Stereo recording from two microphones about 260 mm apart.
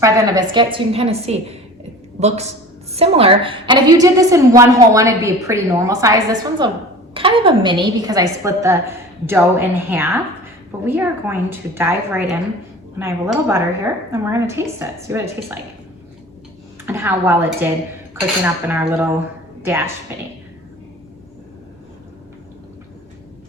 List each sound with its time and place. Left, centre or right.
0.0 s a woman's voice: centre
16.8 s a woman's voice: centre